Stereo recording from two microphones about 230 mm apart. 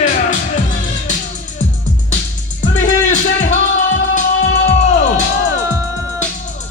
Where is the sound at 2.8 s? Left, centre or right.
Left.